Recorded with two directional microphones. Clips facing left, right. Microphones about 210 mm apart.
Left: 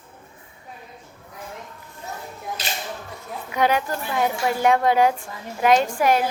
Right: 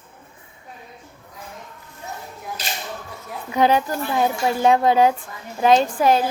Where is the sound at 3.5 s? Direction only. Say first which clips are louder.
Right 3 dB; 30° right (ahead or behind).